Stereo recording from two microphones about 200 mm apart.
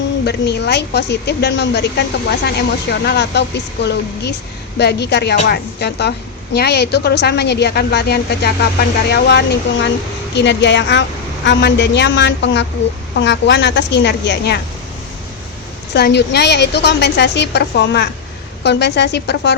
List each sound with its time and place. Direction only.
0.3 s a woman's voice: 55° left (ahead or behind)
15.9 s a woman's voice: 55° left (ahead or behind)